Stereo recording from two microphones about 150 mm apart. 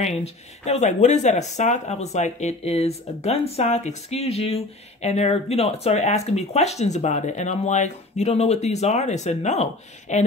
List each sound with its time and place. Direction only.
0.0 s speech: 45° left (ahead or behind)